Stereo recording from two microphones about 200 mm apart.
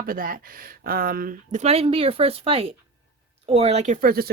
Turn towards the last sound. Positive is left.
turn(degrees=-45)  # may be behind; listen again after turning